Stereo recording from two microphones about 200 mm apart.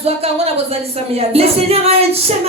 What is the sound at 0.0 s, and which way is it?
Music, 30° right (ahead or behind).